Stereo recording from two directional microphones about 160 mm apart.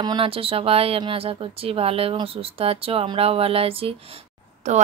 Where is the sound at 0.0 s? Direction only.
30° right (ahead or behind).